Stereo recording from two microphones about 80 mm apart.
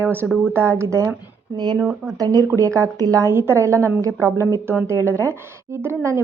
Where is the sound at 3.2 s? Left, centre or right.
Right.